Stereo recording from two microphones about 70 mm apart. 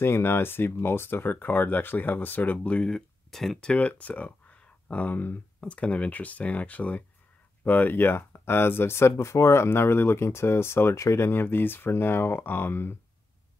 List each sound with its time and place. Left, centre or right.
0.0 s speech: left
2.9 s speech: centre
3.7 s speech: left